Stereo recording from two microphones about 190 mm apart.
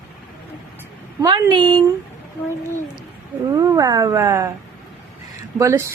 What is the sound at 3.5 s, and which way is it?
Speech, 20° right (ahead or behind).